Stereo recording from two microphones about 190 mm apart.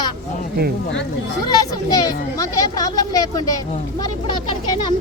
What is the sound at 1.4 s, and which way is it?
A woman's voice, 20° left (ahead or behind).